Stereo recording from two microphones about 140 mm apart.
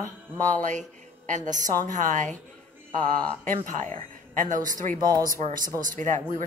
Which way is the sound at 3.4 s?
65° right (ahead or behind).